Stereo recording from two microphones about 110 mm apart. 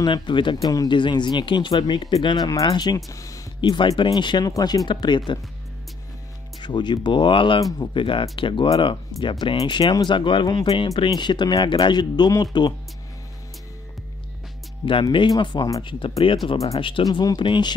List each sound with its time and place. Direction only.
0.0 s speech: 45° left (ahead or behind)
3.1 s a sound: 30° left (ahead or behind)
3.9 s speech: 45° left (ahead or behind)
6.6 s speech: 45° left (ahead or behind)
14.9 s speech: 50° left (ahead or behind)
17.0 s speech: 35° left (ahead or behind)